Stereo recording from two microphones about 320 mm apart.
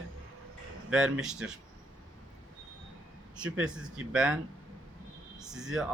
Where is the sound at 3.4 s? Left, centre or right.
Centre.